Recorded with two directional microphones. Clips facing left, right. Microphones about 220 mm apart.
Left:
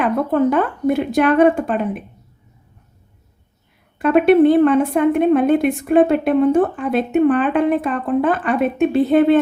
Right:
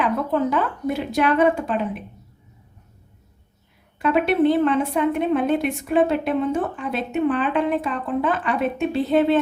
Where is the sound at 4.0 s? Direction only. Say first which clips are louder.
Left 7 dB; 50° left (ahead or behind).